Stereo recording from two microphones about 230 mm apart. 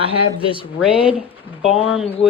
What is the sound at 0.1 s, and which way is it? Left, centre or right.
Speech, left.